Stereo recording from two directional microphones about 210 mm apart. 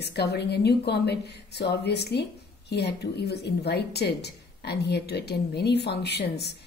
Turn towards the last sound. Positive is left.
turn(degrees=50)  # may be behind; listen again after turning